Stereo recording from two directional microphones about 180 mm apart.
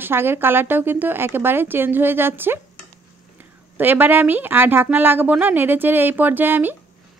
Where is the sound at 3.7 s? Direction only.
10° right (ahead or behind).